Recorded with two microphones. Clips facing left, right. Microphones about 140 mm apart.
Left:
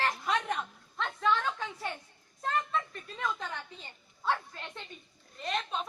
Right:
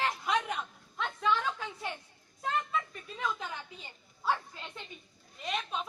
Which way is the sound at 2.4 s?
5° right (ahead or behind).